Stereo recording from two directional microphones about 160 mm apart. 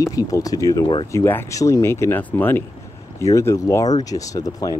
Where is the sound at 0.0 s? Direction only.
20° left (ahead or behind).